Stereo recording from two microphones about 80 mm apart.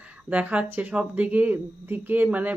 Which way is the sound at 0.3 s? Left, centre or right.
Centre.